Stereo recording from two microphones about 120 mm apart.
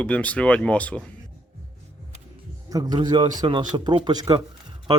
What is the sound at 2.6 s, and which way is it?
A man's voice, 35° right (ahead or behind).